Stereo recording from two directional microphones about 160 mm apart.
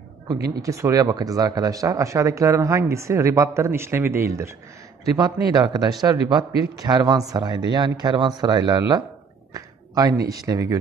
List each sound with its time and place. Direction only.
0.6 s speech: 20° right (ahead or behind)